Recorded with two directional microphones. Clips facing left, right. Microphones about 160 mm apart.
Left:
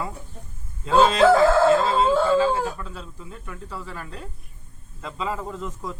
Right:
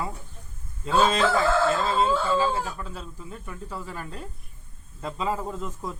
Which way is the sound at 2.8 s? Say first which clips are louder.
Even; 5° right (ahead or behind).